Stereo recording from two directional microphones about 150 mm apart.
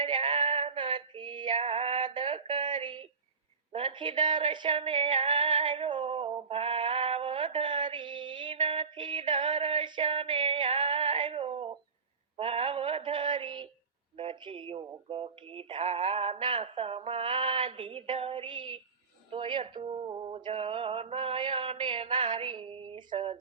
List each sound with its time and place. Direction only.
0.0 s female singing: 35° right (ahead or behind)
1.5 s female singing: 45° right (ahead or behind)
3.7 s male singing: 35° right (ahead or behind)
5.6 s female singing: 35° right (ahead or behind)
14.2 s speech: 35° right (ahead or behind)
15.9 s male singing: 40° right (ahead or behind)